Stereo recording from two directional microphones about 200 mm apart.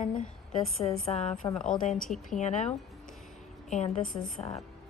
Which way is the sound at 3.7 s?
35° left (ahead or behind).